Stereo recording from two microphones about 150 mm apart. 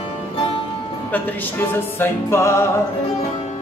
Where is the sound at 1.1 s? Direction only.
15° left (ahead or behind).